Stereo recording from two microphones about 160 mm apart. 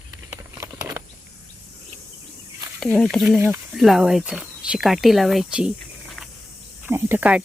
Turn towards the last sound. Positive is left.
turn(degrees=-10)  # may be behind; listen again after turning